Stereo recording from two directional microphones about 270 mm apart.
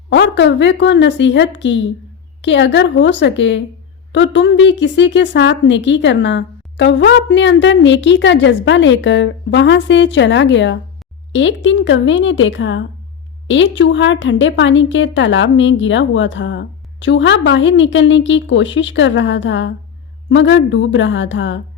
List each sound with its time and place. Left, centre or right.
0.1 s a woman's voice: left